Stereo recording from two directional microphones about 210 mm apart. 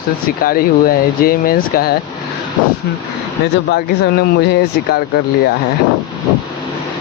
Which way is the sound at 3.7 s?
50° left (ahead or behind).